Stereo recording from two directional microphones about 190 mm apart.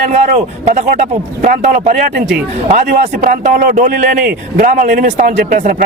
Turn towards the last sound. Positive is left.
turn(degrees=-40)  # may be behind; listen again after turning